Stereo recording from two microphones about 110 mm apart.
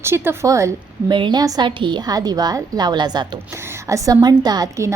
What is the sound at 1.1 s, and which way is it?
A woman's voice, 45° right (ahead or behind).